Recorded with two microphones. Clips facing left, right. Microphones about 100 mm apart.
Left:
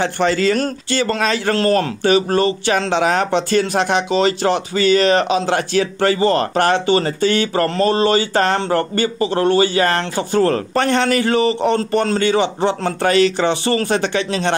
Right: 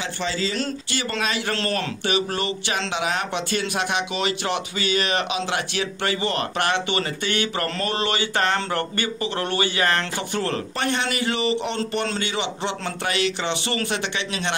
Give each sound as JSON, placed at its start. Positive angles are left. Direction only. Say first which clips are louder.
{"t": 0.0, "sound": "speech", "louder": "left 10 dB", "side_deg": 65}
{"t": 0.9, "sound": "a man's voice", "louder": "left 8 dB", "side_deg": 45}